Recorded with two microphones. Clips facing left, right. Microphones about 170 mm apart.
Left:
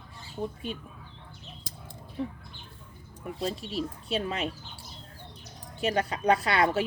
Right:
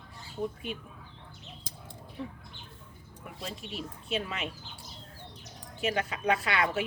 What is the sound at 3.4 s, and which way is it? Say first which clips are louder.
A woman's voice: left 8 dB; 35° left (ahead or behind).